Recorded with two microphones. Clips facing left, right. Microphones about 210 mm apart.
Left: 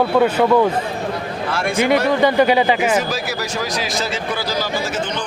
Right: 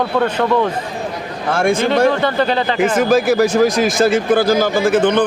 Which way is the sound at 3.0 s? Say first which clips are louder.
Right 11 dB; 50° right (ahead or behind).